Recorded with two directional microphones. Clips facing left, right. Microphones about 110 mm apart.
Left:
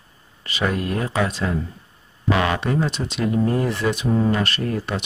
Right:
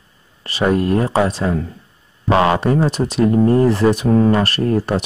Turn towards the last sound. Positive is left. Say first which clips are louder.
# right 7 dB
turn(degrees=-40)  # may be behind; listen again after turning